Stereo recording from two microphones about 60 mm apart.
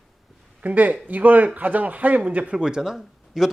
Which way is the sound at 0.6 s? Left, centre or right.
Right.